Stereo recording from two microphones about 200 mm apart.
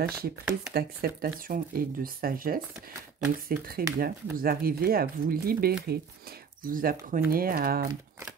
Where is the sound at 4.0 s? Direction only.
45° right (ahead or behind).